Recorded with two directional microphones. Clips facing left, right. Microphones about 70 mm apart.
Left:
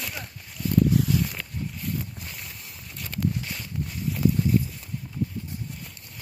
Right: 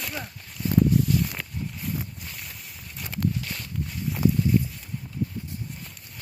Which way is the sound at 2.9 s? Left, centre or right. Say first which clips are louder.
Right 1 dB; centre.